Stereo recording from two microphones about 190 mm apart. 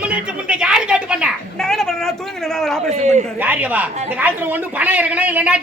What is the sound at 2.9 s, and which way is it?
Speech, 35° right (ahead or behind).